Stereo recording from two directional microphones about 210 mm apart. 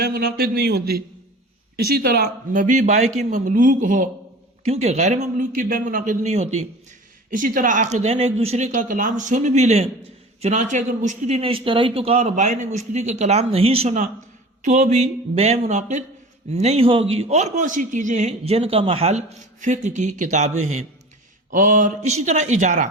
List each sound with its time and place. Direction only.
0.0 s a man's voice: 45° right (ahead or behind)